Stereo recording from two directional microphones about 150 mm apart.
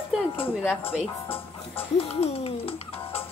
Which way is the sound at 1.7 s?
40° left (ahead or behind).